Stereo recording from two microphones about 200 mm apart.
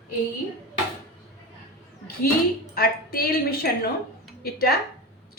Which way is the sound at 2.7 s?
50° left (ahead or behind).